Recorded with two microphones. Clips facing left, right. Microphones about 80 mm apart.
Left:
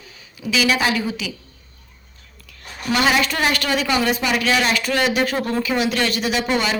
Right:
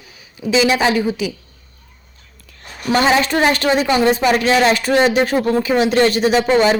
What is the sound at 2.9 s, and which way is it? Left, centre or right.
A woman's voice, right.